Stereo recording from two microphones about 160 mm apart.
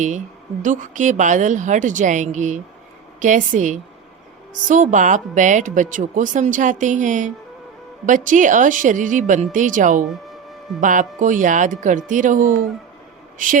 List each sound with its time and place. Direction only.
0.6 s speech: 50° right (ahead or behind)
10.1 s music: centre (ahead or behind)
10.8 s speech: 55° right (ahead or behind)